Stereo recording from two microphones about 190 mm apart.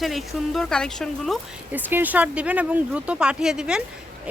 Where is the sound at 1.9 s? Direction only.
10° right (ahead or behind).